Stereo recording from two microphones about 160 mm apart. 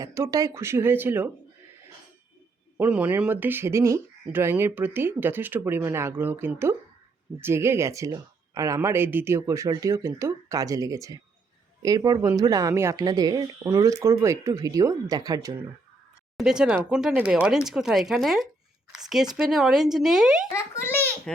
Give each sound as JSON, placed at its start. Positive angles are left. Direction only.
{"t": 0.0, "sound": "speech", "side_deg": -20}
{"t": 2.7, "sound": "speech", "side_deg": -10}
{"t": 16.4, "sound": "speech", "side_deg": -5}
{"t": 20.5, "sound": "a child's voice", "side_deg": 15}